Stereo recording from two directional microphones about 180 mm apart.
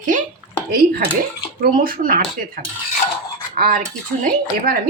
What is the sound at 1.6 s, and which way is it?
A woman's voice, 50° right (ahead or behind).